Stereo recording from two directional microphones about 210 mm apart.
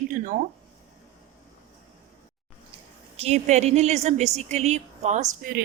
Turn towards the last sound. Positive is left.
turn(degrees=-40)  # may be behind; listen again after turning